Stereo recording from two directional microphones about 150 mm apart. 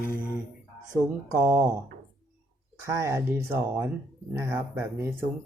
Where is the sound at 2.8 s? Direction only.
20° right (ahead or behind).